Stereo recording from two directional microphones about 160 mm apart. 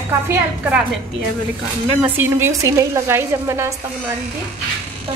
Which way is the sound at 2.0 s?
10° right (ahead or behind).